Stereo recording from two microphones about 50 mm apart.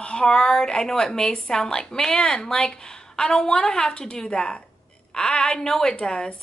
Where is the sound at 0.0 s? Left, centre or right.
Centre.